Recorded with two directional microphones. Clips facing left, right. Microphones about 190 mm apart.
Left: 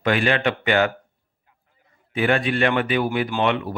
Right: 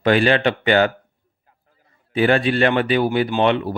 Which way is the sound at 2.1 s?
35° right (ahead or behind).